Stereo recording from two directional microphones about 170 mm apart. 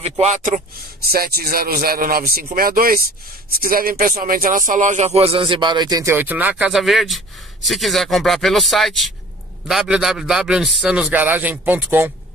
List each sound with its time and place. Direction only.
0.2 s speech: 45° right (ahead or behind)
1.0 s speech: 65° right (ahead or behind); by 6.1 s 20° right (ahead or behind)
6.1 s a man's voice: 10° right (ahead or behind)